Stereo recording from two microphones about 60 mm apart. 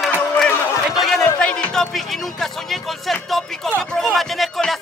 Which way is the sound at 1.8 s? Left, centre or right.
Centre.